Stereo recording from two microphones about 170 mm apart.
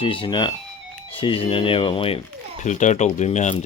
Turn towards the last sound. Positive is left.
turn(degrees=45)  # may be behind; listen again after turning